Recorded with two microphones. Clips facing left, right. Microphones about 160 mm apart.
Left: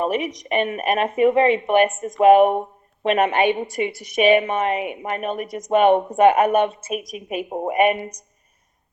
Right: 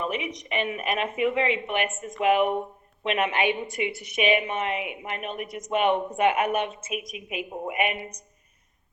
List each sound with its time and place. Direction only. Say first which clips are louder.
0.0 s a woman's voice: left 7 dB; 45° left (ahead or behind)